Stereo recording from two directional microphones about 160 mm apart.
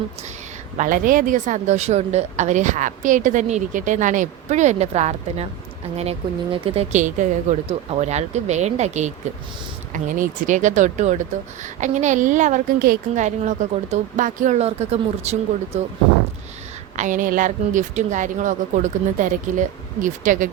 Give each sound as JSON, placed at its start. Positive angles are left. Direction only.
{"t": 0.8, "sound": "a woman's voice", "side_deg": -60}
{"t": 17.0, "sound": "a woman's voice", "side_deg": -55}